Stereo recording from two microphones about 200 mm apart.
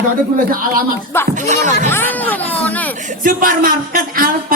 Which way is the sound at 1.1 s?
10° left (ahead or behind).